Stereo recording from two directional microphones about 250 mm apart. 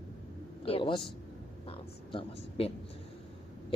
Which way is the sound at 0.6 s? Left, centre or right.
Left.